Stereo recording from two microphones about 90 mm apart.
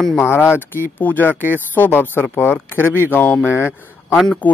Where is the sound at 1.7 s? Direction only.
20° left (ahead or behind).